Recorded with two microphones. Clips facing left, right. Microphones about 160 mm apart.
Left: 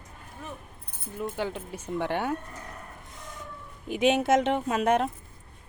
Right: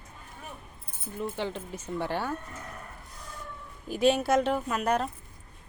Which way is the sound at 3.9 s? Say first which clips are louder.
Left 1 dB; 20° left (ahead or behind).